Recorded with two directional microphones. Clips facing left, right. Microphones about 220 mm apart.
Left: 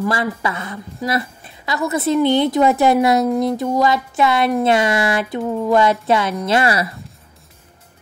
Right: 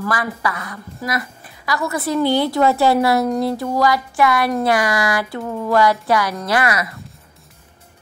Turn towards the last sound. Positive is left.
turn(degrees=30)  # may be behind; listen again after turning